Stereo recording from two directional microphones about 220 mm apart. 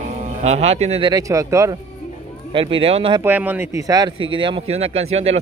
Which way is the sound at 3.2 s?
10° right (ahead or behind).